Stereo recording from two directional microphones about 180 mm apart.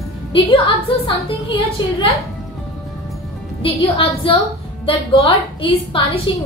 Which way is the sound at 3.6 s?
30° left (ahead or behind).